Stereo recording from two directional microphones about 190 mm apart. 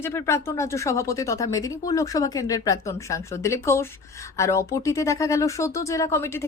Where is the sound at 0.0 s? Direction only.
15° left (ahead or behind).